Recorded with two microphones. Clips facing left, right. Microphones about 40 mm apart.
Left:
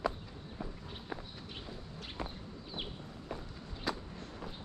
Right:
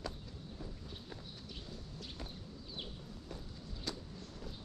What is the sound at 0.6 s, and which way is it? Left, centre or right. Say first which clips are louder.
Walk: left 7 dB; left.